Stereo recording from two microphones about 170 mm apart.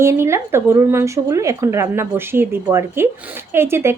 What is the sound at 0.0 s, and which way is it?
Speech, 15° right (ahead or behind).